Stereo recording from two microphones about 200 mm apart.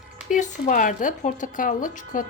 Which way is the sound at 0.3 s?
40° left (ahead or behind).